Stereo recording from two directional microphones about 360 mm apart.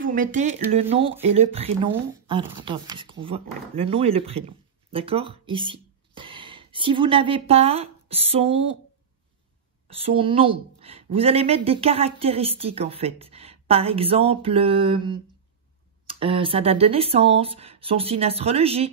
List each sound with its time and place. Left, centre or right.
0.0 s a woman's voice: right
9.8 s a woman's voice: centre